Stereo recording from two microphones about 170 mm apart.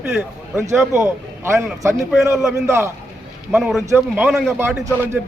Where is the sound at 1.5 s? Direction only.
15° right (ahead or behind).